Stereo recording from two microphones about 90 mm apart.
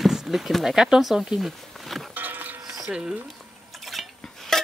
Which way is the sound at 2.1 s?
20° right (ahead or behind).